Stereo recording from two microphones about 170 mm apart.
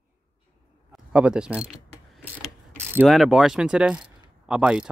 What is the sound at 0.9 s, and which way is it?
Speech, 5° right (ahead or behind).